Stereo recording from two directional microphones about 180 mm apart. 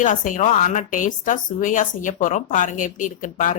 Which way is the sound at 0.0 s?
45° left (ahead or behind).